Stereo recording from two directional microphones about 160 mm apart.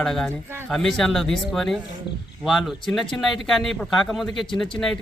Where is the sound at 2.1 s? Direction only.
30° left (ahead or behind).